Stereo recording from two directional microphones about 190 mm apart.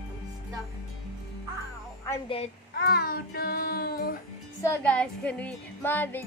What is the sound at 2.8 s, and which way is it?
Child singing, 55° left (ahead or behind).